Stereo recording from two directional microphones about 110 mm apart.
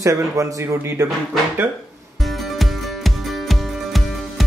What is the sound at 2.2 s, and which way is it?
Music, centre (ahead or behind).